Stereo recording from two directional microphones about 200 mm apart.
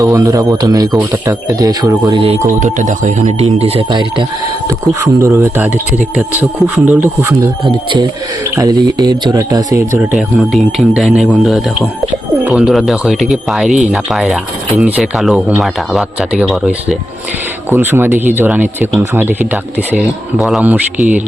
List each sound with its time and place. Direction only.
0.0 s speech: 15° right (ahead or behind)
10.1 s speech: centre (ahead or behind)